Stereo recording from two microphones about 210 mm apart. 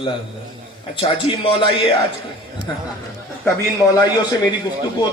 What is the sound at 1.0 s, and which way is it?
Speech, 25° left (ahead or behind).